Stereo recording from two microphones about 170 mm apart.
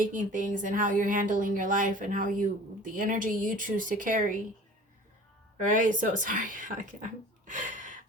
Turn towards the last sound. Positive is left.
turn(degrees=-50)  # may be behind; listen again after turning